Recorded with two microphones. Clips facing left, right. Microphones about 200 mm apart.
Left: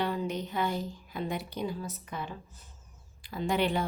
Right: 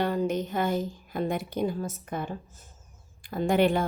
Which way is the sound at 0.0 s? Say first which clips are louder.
Right 5 dB; 45° right (ahead or behind).